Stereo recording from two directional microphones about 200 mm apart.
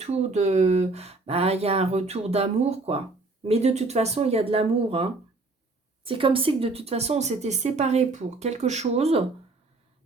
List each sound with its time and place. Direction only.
0.0 s speech: 30° right (ahead or behind)